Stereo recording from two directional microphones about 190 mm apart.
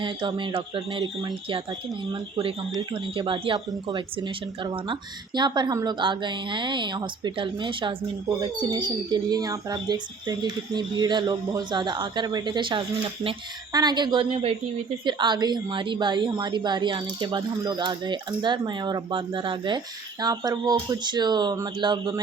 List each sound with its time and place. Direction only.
0.0 s speech: 25° right (ahead or behind)